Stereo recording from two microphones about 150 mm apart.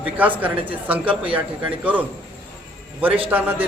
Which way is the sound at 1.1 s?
35° right (ahead or behind).